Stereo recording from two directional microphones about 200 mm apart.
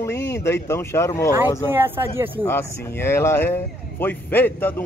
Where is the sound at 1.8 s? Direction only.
10° right (ahead or behind).